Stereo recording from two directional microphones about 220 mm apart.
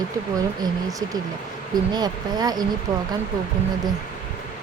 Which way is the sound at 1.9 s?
20° right (ahead or behind).